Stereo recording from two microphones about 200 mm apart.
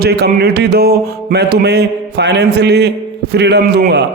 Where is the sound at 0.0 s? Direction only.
50° right (ahead or behind).